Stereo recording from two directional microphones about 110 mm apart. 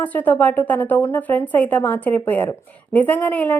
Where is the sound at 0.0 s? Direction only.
15° left (ahead or behind).